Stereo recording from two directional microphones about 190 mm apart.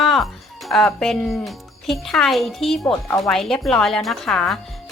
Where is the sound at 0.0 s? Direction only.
Centre (ahead or behind).